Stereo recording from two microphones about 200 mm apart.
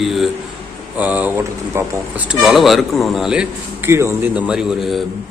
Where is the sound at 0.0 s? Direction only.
Centre (ahead or behind).